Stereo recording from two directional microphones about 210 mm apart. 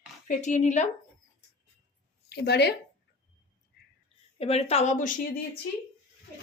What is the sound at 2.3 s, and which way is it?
Speech, 50° left (ahead or behind).